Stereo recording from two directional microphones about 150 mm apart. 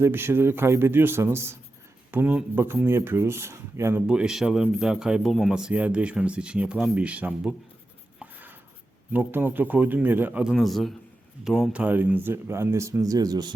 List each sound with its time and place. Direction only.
0.0 s speech: 15° right (ahead or behind)
4.0 s speech: 5° right (ahead or behind)
8.2 s writing: 10° right (ahead or behind)
9.1 s speech: 15° right (ahead or behind)